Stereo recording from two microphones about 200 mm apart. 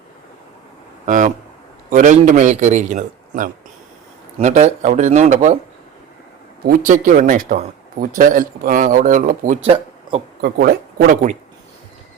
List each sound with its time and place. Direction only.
1.0 s a man's voice: 40° right (ahead or behind)
6.7 s a man's voice: 40° right (ahead or behind)
9.6 s speech: 30° right (ahead or behind)
10.4 s a man's voice: 50° right (ahead or behind)